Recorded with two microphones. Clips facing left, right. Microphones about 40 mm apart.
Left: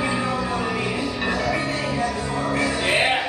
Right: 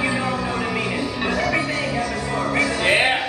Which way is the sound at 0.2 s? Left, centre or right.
Right.